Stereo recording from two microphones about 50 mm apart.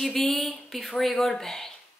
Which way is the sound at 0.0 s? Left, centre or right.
Centre.